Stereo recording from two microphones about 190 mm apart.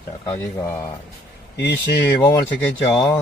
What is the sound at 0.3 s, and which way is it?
Speech, 15° left (ahead or behind).